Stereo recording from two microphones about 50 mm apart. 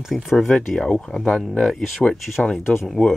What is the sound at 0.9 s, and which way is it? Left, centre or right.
Speech, centre.